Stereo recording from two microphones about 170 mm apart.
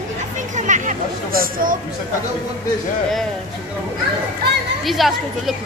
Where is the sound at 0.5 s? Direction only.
45° right (ahead or behind).